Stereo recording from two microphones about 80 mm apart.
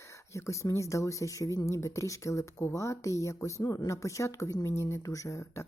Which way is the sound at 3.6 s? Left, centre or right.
Left.